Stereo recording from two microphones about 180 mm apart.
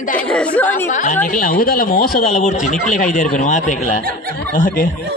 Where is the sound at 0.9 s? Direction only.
45° left (ahead or behind).